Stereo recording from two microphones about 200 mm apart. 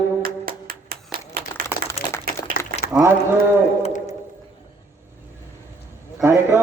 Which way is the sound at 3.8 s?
35° left (ahead or behind).